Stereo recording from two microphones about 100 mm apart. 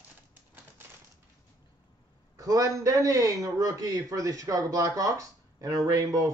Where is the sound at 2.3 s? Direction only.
35° right (ahead or behind).